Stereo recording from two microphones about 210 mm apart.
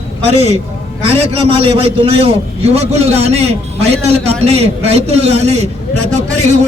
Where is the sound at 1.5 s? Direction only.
25° right (ahead or behind).